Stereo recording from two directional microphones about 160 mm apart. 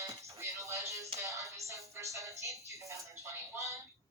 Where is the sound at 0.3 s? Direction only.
20° right (ahead or behind).